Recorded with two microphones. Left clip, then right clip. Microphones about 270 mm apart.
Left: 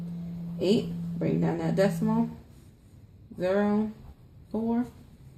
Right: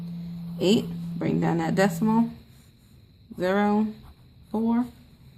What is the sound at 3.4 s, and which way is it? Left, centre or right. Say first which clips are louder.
Speech: right 2 dB; right.